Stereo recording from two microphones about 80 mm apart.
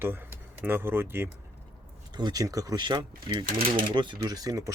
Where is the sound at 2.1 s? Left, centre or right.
Right.